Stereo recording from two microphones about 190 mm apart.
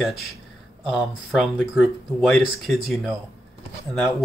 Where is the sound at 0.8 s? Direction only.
Centre (ahead or behind).